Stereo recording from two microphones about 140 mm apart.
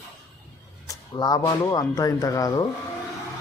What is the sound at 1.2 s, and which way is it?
Speech, 25° left (ahead or behind).